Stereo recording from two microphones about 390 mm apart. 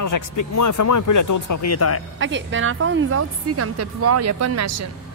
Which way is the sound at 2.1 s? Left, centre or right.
Right.